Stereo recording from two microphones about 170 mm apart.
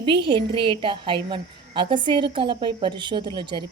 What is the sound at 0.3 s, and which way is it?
A woman's voice, 30° right (ahead or behind).